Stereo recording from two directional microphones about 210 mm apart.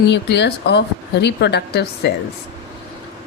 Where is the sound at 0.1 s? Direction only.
55° left (ahead or behind).